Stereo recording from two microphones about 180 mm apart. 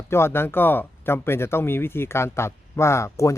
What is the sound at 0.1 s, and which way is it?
A man's voice, 15° left (ahead or behind).